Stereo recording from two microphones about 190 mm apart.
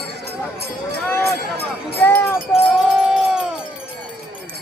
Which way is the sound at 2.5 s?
5° right (ahead or behind).